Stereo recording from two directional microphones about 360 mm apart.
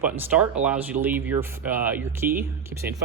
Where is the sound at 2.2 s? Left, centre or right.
Right.